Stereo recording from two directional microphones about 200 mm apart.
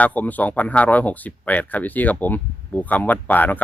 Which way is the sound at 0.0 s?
10° left (ahead or behind).